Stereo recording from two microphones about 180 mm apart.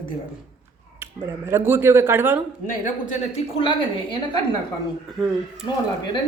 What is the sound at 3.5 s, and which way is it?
Speech, 25° left (ahead or behind).